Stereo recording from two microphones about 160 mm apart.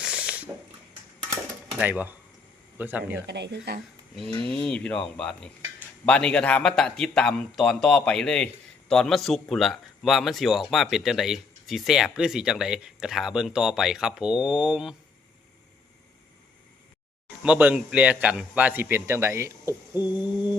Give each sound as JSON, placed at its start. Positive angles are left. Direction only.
{"t": 0.0, "sound": "a sound", "side_deg": -5}
{"t": 1.7, "sound": "a man's voice", "side_deg": -10}
{"t": 3.2, "sound": "speech", "side_deg": -90}
{"t": 4.6, "sound": "a man's voice", "side_deg": 5}
{"t": 17.4, "sound": "a man's voice", "side_deg": -10}